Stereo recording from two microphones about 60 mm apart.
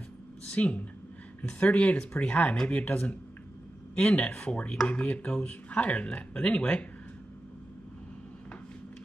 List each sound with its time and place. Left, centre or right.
0.5 s speech: left